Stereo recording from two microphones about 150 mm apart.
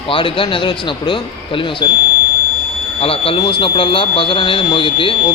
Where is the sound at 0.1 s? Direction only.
35° left (ahead or behind).